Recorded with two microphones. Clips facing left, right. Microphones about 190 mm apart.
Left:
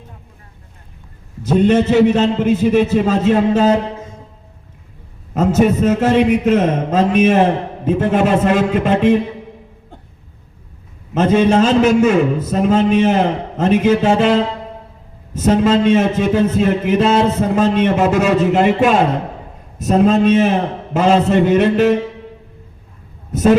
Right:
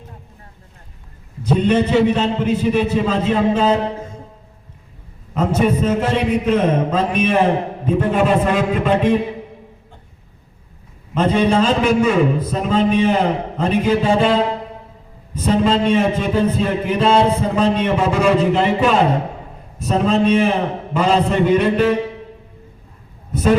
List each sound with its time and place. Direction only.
1.5 s a man's voice: 45° left (ahead or behind)
5.3 s a man's voice: 45° left (ahead or behind)
11.1 s a man's voice: 45° left (ahead or behind)